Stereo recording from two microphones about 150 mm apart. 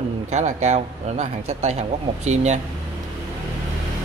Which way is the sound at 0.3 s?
50° right (ahead or behind).